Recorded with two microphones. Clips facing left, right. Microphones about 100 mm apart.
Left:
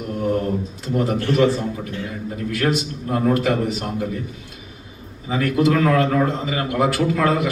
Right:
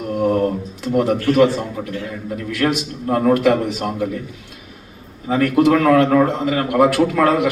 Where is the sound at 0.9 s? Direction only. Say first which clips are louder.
Right 4 dB; 65° right (ahead or behind).